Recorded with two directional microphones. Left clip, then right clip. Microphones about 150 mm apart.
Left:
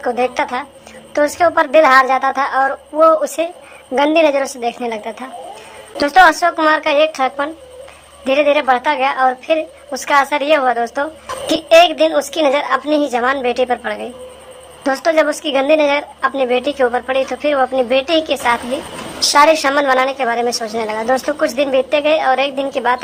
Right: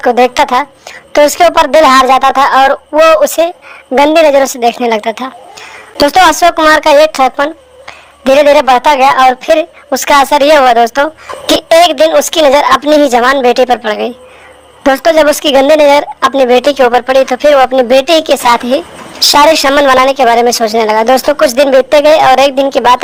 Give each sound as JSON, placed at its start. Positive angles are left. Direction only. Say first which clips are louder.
{"t": 0.0, "sound": "a woman's voice", "louder": "right 10 dB", "side_deg": -40}